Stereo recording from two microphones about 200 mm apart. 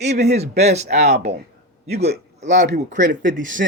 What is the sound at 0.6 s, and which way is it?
Speech, 35° right (ahead or behind).